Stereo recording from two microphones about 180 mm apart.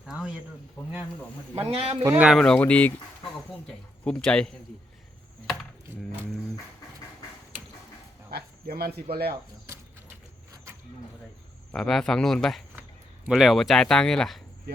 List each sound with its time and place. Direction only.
0.0 s speech: 5° right (ahead or behind)
1.6 s speech: 35° right (ahead or behind)
2.0 s speech: 5° right (ahead or behind)
4.0 s speech: 5° left (ahead or behind)
8.3 s a sound: 60° right (ahead or behind)
11.7 s speech: centre (ahead or behind)